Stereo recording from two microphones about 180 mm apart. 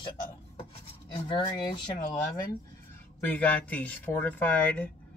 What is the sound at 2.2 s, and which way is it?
Speech, 55° left (ahead or behind).